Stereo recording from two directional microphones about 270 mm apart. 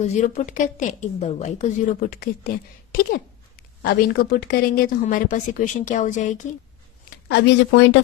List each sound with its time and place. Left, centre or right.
0.0 s a woman's voice: left
7.1 s speech: left